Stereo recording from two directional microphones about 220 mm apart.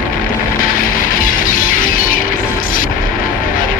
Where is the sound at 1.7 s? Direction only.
40° left (ahead or behind).